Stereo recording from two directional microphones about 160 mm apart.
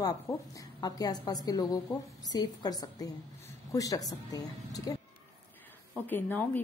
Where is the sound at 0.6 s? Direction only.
25° left (ahead or behind).